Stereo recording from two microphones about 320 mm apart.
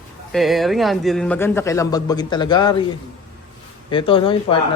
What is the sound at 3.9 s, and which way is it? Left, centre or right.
Speech, centre.